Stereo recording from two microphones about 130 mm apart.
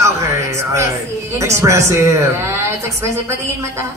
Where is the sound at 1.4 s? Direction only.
20° right (ahead or behind).